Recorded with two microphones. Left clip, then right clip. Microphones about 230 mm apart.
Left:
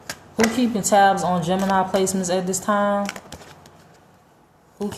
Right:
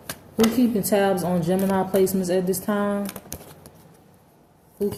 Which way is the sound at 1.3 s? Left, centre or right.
Left.